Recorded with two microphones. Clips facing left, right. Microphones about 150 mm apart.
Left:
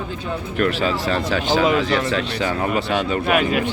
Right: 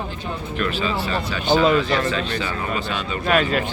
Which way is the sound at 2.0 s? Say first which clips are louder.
Left 2 dB; 70° left (ahead or behind).